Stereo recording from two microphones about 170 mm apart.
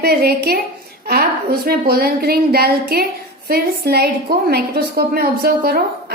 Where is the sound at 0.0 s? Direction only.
65° right (ahead or behind).